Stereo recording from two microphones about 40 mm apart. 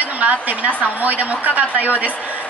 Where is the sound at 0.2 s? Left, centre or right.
Right.